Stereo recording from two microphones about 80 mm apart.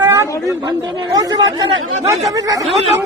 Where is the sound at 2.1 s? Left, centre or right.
Right.